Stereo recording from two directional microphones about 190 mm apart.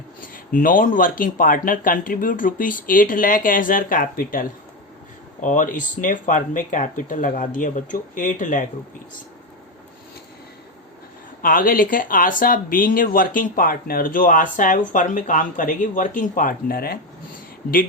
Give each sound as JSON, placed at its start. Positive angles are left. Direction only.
{"t": 0.2, "sound": "speech", "side_deg": 45}
{"t": 11.4, "sound": "speech", "side_deg": 45}